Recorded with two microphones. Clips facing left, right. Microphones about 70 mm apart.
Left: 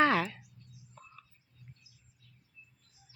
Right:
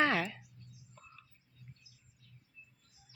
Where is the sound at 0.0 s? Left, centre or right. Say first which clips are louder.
Left 4 dB; centre.